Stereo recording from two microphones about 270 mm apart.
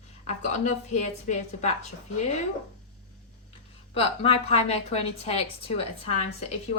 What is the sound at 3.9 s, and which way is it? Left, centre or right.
A woman's voice, left.